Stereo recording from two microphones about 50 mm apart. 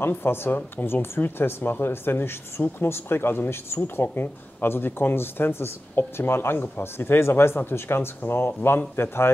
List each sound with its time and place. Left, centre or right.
0.0 s speech: left
0.6 s speech: left